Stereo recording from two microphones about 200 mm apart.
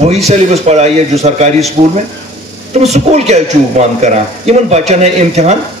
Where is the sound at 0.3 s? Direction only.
35° right (ahead or behind).